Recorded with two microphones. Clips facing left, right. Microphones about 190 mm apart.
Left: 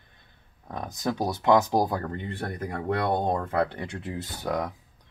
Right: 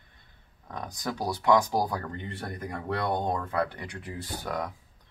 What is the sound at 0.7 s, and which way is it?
Speech, 25° left (ahead or behind).